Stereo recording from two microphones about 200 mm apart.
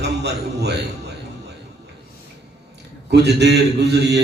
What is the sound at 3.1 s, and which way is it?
Mantra, 55° right (ahead or behind).